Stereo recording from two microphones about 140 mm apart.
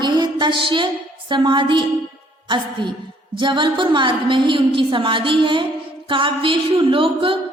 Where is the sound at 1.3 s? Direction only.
35° right (ahead or behind).